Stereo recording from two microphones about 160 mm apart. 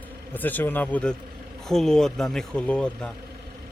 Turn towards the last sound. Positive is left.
turn(degrees=5)  # may be behind; listen again after turning